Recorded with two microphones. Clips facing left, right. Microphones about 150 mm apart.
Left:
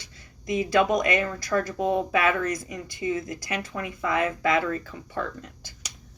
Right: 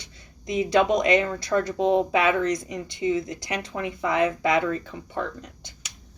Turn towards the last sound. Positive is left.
turn(degrees=-20)  # may be behind; listen again after turning